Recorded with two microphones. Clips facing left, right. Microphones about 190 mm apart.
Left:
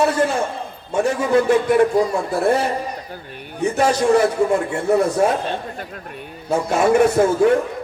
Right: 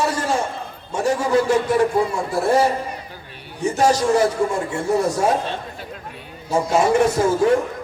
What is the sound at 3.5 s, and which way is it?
A man's voice, 60° left (ahead or behind).